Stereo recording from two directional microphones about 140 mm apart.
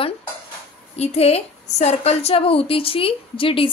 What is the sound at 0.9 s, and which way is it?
A woman's voice, 50° left (ahead or behind).